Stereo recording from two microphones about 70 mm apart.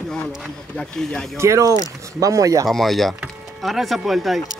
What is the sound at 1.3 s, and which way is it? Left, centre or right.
Speech, right.